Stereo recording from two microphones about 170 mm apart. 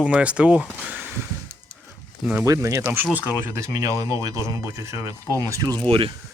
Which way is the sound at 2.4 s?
20° right (ahead or behind).